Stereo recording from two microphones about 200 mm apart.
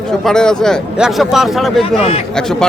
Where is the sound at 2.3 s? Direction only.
5° left (ahead or behind).